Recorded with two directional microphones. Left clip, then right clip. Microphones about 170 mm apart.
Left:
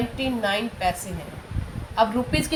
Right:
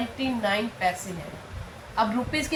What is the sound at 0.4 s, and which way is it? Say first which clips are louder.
Speech: even; 50° left (ahead or behind).